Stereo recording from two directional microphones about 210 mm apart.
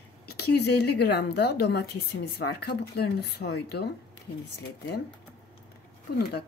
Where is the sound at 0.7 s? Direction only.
50° left (ahead or behind).